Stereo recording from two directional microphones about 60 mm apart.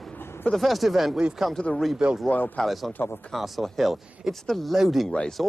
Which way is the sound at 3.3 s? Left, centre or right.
Centre.